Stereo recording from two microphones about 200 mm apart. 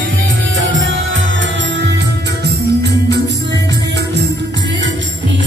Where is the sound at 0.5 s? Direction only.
75° right (ahead or behind).